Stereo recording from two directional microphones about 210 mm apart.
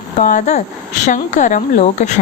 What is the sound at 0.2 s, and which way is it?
Speech, 35° left (ahead or behind).